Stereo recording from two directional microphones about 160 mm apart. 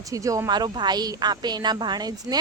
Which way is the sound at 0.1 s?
20° right (ahead or behind).